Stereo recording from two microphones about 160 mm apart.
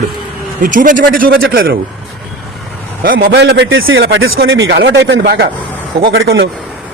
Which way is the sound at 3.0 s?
70° right (ahead or behind).